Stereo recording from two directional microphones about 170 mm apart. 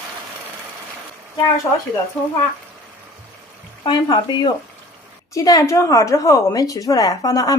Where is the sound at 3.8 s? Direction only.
30° left (ahead or behind).